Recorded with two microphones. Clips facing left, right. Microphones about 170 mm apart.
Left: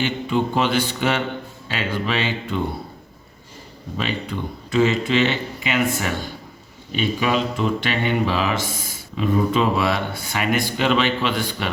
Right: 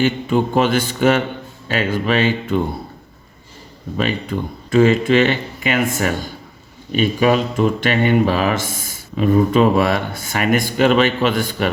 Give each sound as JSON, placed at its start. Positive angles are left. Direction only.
{"t": 0.0, "sound": "speech", "side_deg": -45}
{"t": 3.9, "sound": "speech", "side_deg": -50}